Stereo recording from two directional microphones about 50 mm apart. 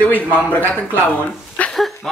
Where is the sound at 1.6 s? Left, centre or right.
Left.